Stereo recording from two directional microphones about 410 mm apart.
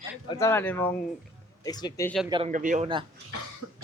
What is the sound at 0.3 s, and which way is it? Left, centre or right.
Speech, centre.